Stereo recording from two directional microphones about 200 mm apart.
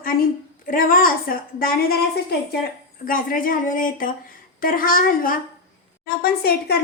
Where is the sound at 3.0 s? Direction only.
45° left (ahead or behind).